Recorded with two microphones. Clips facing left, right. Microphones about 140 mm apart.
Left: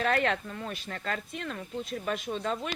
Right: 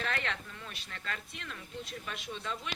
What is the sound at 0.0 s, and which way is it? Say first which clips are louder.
Speech: left 9 dB; 45° left (ahead or behind).